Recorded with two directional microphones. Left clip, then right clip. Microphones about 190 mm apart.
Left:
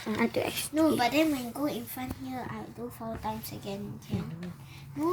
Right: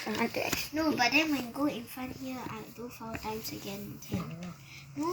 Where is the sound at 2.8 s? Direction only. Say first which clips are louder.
Left 3 dB; 25° left (ahead or behind).